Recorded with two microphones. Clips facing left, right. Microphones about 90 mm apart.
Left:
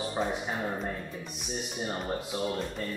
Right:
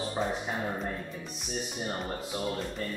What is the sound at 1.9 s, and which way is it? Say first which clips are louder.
Speech: left 3 dB; centre (ahead or behind).